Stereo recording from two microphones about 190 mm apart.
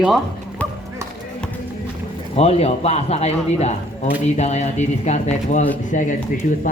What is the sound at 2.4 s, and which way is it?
A man's voice, 35° left (ahead or behind).